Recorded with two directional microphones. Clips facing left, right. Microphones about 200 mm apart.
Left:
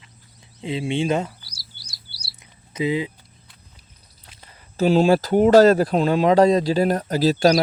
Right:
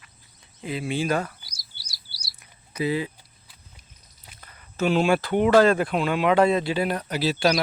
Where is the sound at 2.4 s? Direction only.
20° left (ahead or behind).